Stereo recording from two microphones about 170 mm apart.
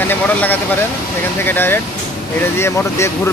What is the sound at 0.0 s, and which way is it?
Speech, 10° left (ahead or behind).